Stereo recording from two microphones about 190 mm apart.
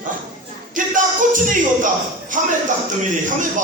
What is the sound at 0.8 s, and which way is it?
Music, 45° right (ahead or behind).